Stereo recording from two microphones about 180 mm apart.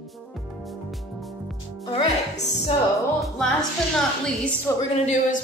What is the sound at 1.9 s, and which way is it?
Music, 35° left (ahead or behind).